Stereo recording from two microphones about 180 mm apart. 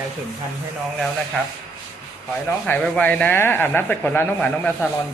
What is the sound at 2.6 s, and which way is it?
A man's voice, 5° left (ahead or behind).